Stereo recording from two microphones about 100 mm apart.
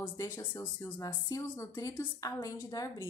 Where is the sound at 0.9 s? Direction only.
30° left (ahead or behind).